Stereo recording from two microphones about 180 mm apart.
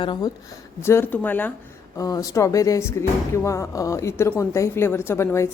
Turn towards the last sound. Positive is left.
turn(degrees=15)  # may be behind; listen again after turning